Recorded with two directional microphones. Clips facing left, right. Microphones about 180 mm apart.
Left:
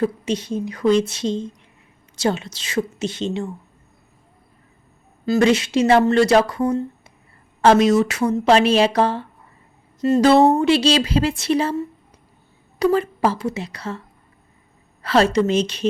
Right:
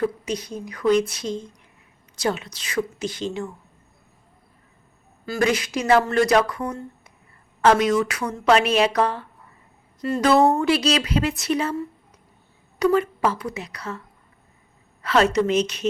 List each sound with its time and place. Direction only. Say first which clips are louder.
0.0 s speech: left 3 dB; 25° left (ahead or behind)
5.2 s speech: left 6 dB; 25° left (ahead or behind)
12.8 s speech: left 2 dB; 30° left (ahead or behind)
15.0 s a woman's voice: left 2 dB; 35° left (ahead or behind)